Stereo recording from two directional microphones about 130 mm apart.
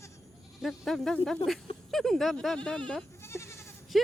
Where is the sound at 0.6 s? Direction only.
Centre (ahead or behind).